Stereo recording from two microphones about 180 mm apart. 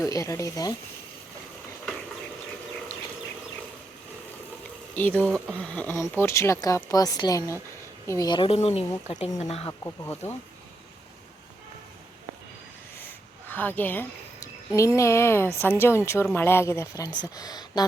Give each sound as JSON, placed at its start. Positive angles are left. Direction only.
{"t": 0.0, "sound": "a woman's voice", "side_deg": 15}
{"t": 4.9, "sound": "a woman's voice", "side_deg": 10}
{"t": 9.8, "sound": "a woman's voice", "side_deg": 15}
{"t": 13.0, "sound": "a sound", "side_deg": 10}
{"t": 14.7, "sound": "a woman's voice", "side_deg": 15}